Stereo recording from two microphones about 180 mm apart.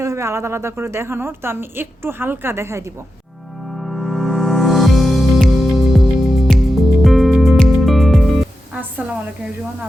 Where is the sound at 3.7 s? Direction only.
Centre (ahead or behind).